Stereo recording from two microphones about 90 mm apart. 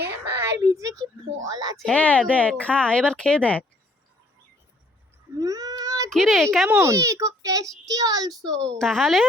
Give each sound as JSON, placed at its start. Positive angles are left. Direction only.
{"t": 0.1, "sound": "a sound", "side_deg": -25}
{"t": 1.5, "sound": "a child's voice", "side_deg": -45}
{"t": 1.8, "sound": "speech", "side_deg": 15}
{"t": 5.4, "sound": "a sound", "side_deg": -40}
{"t": 6.1, "sound": "speech", "side_deg": 5}
{"t": 6.8, "sound": "a child's voice", "side_deg": -35}
{"t": 8.4, "sound": "speech", "side_deg": 10}